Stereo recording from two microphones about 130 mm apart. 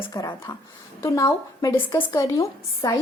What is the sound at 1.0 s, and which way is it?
Speech, 20° left (ahead or behind).